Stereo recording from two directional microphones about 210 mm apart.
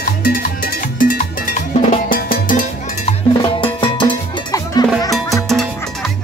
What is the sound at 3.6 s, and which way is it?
Cowbell, 25° left (ahead or behind).